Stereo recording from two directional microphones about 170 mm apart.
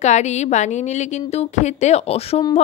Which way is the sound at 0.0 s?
40° left (ahead or behind).